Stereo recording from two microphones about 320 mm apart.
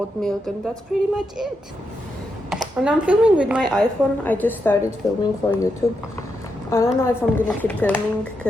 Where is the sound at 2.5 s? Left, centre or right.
Centre.